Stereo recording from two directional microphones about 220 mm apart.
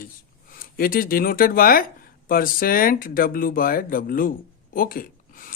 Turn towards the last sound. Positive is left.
turn(degrees=40)  # may be behind; listen again after turning